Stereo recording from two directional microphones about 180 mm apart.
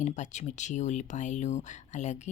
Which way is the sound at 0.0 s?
40° left (ahead or behind).